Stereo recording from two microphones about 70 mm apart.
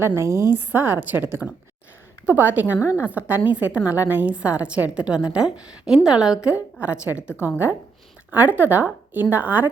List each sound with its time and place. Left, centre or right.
0.2 s a woman's voice: right
0.7 s a woman's voice: right
7.2 s a woman's voice: left
8.3 s a woman's voice: right